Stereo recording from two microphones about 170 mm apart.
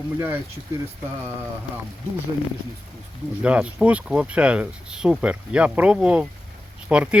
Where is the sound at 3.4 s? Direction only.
5° right (ahead or behind).